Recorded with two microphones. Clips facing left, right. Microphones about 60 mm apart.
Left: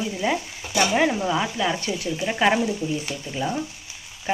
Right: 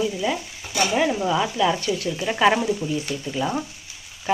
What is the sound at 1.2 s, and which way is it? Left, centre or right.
Speech, centre.